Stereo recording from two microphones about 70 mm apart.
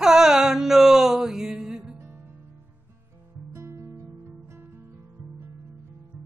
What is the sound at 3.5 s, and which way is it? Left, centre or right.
Music, right.